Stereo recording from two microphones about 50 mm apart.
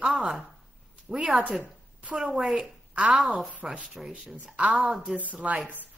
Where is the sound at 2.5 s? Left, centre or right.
Right.